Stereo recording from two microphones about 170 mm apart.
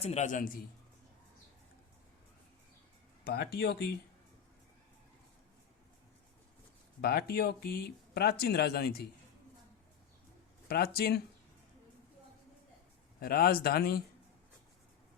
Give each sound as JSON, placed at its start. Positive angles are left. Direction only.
{"t": 0.0, "sound": "a man's voice", "side_deg": 40}
{"t": 3.2, "sound": "speech", "side_deg": 70}
{"t": 7.0, "sound": "speech", "side_deg": 70}
{"t": 10.7, "sound": "speech", "side_deg": 65}
{"t": 13.1, "sound": "speech", "side_deg": 65}